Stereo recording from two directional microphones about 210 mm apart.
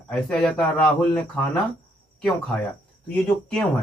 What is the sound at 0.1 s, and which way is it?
Speech, 5° left (ahead or behind).